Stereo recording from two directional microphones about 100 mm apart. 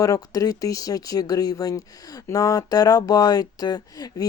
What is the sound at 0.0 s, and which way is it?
Speech, 35° left (ahead or behind).